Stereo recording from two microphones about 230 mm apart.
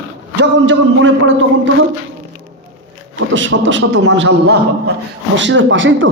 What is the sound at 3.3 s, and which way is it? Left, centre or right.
A man's voice, right.